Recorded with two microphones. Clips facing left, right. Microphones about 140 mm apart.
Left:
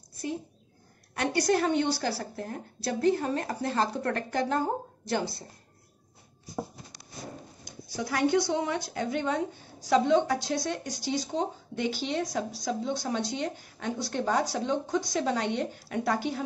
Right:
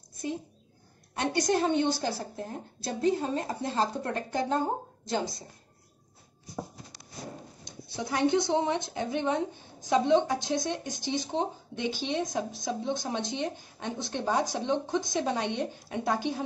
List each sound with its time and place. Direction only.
1.1 s a woman's voice: 20° right (ahead or behind)
7.6 s a woman's voice: 25° right (ahead or behind)